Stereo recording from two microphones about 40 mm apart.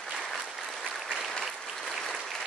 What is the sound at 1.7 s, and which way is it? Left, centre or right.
Applause, centre.